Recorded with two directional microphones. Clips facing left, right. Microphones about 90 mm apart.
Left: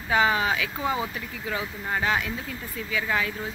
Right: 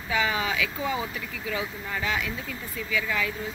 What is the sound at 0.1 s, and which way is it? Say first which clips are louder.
Speech: left 4 dB; 35° left (ahead or behind).